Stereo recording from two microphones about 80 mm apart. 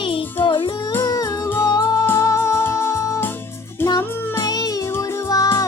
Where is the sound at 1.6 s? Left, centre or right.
Left.